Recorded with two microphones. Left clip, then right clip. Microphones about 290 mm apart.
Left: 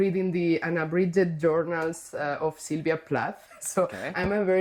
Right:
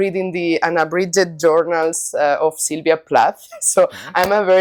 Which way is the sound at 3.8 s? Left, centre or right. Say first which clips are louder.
Right 12 dB; centre.